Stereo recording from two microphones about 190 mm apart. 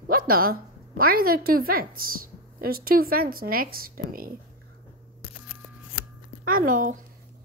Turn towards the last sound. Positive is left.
turn(degrees=-45)  # may be behind; listen again after turning